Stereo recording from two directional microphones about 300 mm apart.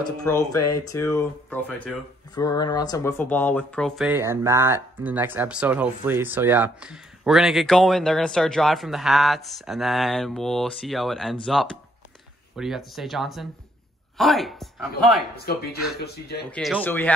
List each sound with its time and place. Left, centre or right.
0.2 s speech: centre
15.4 s speech: left
16.4 s speech: centre